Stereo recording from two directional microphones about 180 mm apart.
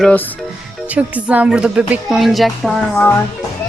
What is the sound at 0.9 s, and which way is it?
A woman's voice, 10° right (ahead or behind).